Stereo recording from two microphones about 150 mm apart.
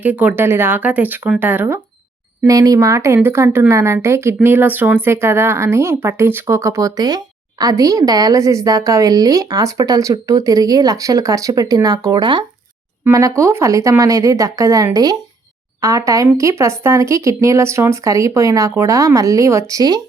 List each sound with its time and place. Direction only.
0.0 s a woman's voice: 10° right (ahead or behind); by 12.5 s 30° right (ahead or behind)
13.1 s a woman's voice: 20° right (ahead or behind)